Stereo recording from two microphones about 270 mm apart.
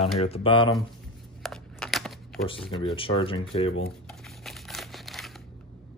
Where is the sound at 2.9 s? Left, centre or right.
Centre.